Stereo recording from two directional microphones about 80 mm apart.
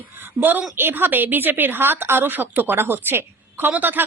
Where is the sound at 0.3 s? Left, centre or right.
Right.